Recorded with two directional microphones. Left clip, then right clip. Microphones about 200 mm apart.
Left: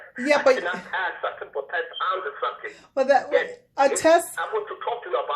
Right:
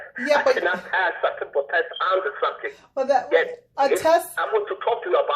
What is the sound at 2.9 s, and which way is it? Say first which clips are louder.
Speech: left 1 dB; 20° left (ahead or behind).